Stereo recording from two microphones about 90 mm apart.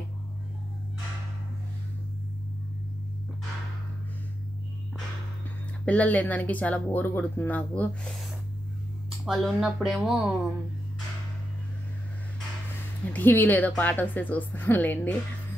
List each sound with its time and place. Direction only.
5.9 s speech: 15° left (ahead or behind)
9.2 s speech: 5° right (ahead or behind)
13.1 s speech: 20° left (ahead or behind)